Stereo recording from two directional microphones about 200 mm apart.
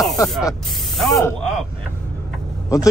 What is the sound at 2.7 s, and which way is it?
Speech, 15° left (ahead or behind).